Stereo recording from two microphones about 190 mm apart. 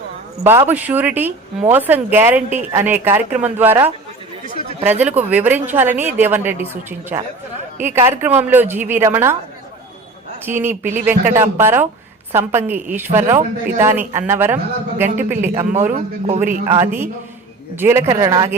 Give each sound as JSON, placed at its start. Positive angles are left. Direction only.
{"t": 0.7, "sound": "a woman's voice", "side_deg": -10}
{"t": 5.0, "sound": "a woman's voice", "side_deg": -10}
{"t": 7.8, "sound": "a woman's voice", "side_deg": -10}
{"t": 10.4, "sound": "a woman's voice", "side_deg": -10}
{"t": 15.7, "sound": "a man's voice", "side_deg": -40}
{"t": 16.6, "sound": "a woman's voice", "side_deg": -15}